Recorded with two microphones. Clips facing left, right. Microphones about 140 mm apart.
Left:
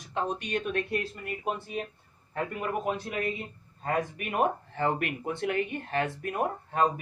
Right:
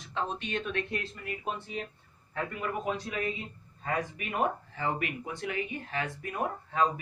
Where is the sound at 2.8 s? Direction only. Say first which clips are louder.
Left 2 dB; 55° left (ahead or behind).